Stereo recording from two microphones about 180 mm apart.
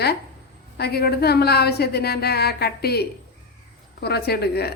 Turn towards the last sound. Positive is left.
turn(degrees=65)  # may be behind; listen again after turning